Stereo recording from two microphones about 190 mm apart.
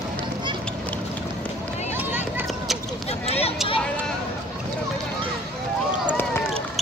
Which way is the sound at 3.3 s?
30° left (ahead or behind).